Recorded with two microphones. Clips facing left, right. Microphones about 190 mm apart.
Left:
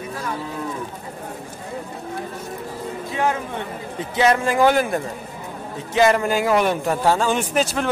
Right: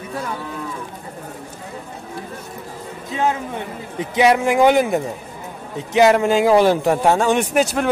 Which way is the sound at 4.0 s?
15° right (ahead or behind).